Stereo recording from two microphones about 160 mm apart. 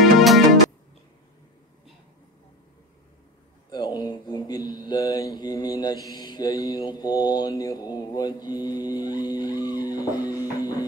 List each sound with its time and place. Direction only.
0.0 s music: centre (ahead or behind)
3.7 s mantra: 25° left (ahead or behind)
10.2 s music: 20° left (ahead or behind)